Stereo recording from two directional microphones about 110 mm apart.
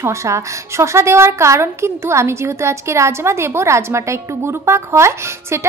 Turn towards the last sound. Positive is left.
turn(degrees=-25)  # may be behind; listen again after turning